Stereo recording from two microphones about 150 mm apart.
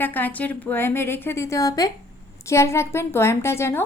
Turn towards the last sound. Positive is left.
turn(degrees=15)  # may be behind; listen again after turning